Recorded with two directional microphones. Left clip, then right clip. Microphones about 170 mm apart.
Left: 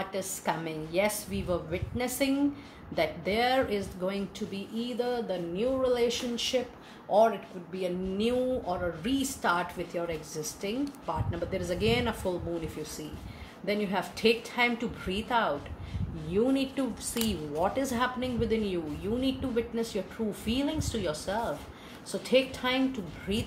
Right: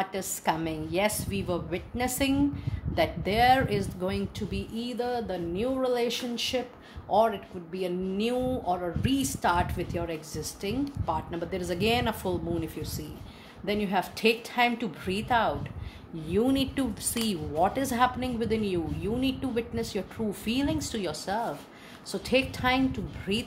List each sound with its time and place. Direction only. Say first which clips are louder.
0.0 s a woman's voice: right 3 dB; 50° right (ahead or behind)
13.7 s a woman's voice: right 2 dB; 50° right (ahead or behind)